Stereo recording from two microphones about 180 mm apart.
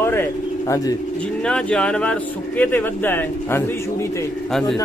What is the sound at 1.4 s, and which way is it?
Speech, 5° left (ahead or behind).